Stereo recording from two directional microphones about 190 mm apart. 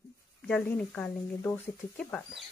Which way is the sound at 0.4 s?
10° left (ahead or behind).